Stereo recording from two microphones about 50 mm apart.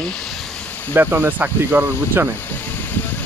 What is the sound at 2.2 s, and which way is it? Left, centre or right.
Speech, right.